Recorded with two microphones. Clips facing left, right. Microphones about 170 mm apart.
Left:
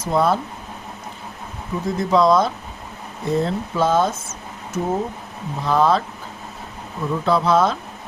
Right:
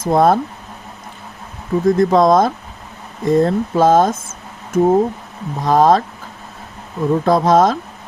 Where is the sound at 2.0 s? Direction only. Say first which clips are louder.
Right 2 dB; 50° right (ahead or behind).